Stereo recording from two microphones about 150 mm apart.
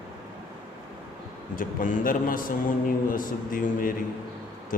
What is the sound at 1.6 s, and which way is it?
A man's voice, 65° left (ahead or behind).